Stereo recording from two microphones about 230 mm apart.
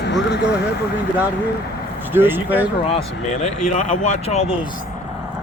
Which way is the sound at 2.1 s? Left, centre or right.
Centre.